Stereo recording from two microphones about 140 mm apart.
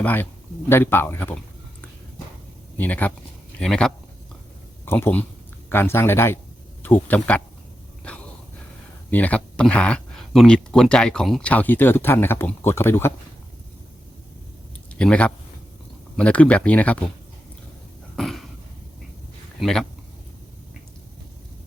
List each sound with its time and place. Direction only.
0.0 s speech: 15° left (ahead or behind)
2.7 s speech: 10° left (ahead or behind)
4.9 s speech: 15° left (ahead or behind)
8.0 s a sound: 10° left (ahead or behind)
9.0 s speech: 10° left (ahead or behind)
14.9 s speech: 10° left (ahead or behind)
18.2 s a sound: centre (ahead or behind)
19.6 s speech: 5° left (ahead or behind)